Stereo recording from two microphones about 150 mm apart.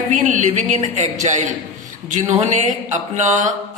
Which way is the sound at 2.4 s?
55° right (ahead or behind).